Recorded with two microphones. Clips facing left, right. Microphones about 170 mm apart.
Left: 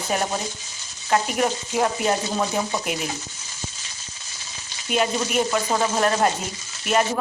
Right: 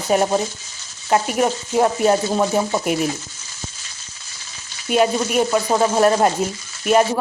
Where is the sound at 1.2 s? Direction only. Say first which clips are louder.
Right 4 dB; 40° right (ahead or behind).